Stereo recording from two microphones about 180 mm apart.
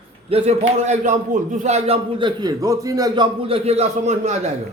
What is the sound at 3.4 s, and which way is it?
Speech, 35° right (ahead or behind).